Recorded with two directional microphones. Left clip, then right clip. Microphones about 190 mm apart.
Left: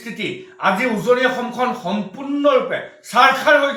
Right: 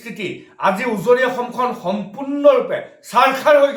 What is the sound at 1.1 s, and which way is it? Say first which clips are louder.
Speech: right 2 dB; 15° right (ahead or behind).